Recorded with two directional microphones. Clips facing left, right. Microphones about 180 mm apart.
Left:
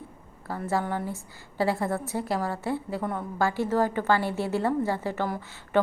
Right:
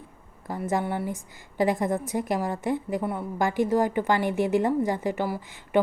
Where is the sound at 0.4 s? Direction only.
15° right (ahead or behind).